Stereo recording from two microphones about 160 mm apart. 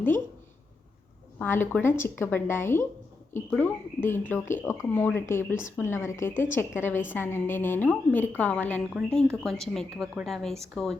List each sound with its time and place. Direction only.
1.4 s speech: 10° left (ahead or behind)